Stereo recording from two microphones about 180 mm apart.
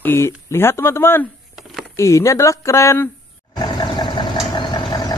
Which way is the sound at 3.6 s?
25° left (ahead or behind).